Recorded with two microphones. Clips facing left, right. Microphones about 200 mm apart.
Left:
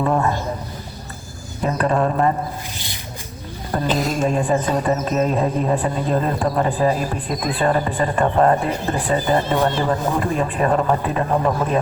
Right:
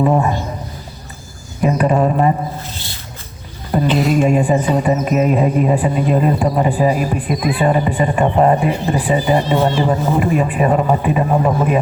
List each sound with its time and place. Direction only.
0.0 s speech: 15° right (ahead or behind)
1.6 s speech: 15° right (ahead or behind)
2.7 s a sound: 15° left (ahead or behind)
3.8 s a woman's voice: 40° left (ahead or behind)
4.2 s speech: 10° right (ahead or behind)